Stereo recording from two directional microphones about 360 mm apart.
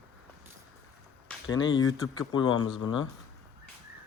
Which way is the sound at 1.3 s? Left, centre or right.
Centre.